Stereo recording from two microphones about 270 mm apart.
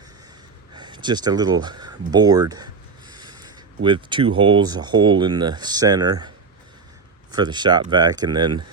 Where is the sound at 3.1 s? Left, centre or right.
Centre.